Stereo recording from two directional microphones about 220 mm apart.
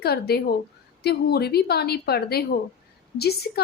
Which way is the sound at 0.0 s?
45° left (ahead or behind).